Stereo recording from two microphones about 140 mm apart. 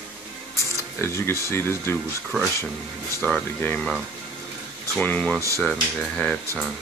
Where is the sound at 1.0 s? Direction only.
20° left (ahead or behind).